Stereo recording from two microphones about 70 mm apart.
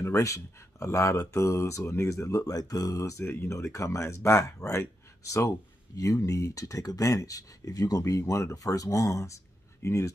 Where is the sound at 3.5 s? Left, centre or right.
Left.